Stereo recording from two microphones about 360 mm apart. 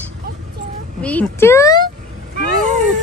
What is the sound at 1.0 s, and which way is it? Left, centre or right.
Speech, centre.